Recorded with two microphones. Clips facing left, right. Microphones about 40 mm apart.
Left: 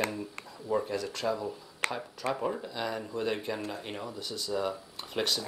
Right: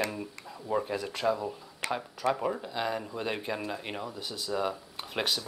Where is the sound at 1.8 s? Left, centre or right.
Left.